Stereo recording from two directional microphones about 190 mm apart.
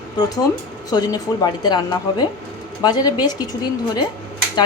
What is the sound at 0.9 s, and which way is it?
A woman's voice, 20° left (ahead or behind).